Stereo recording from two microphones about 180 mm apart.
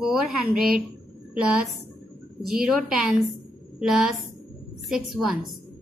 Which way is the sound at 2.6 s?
5° right (ahead or behind).